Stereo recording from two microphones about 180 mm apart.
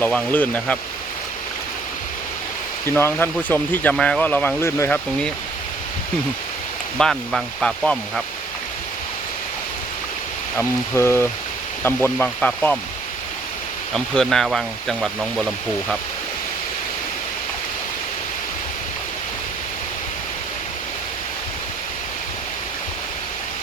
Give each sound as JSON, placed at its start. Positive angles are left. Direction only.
{"t": 0.0, "sound": "speech", "side_deg": 10}
{"t": 2.8, "sound": "speech", "side_deg": 10}
{"t": 7.0, "sound": "speech", "side_deg": 0}
{"t": 10.6, "sound": "speech", "side_deg": 15}
{"t": 13.9, "sound": "speech", "side_deg": 0}